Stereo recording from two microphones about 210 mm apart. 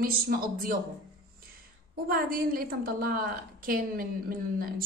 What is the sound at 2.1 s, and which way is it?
A woman's voice, 40° right (ahead or behind).